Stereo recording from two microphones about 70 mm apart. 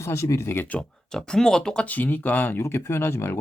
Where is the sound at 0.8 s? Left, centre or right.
Centre.